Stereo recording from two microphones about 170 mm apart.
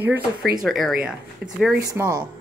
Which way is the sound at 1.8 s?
20° right (ahead or behind).